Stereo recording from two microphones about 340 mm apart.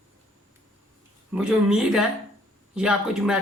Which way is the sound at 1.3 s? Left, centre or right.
Centre.